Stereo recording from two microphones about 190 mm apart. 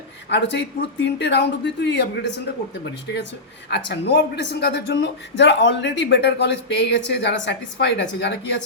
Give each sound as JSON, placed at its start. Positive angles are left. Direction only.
{"t": 0.3, "sound": "speech", "side_deg": 70}
{"t": 3.7, "sound": "speech", "side_deg": 60}